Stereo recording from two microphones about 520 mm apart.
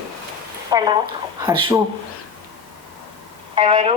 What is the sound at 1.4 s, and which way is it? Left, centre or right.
Speech, centre.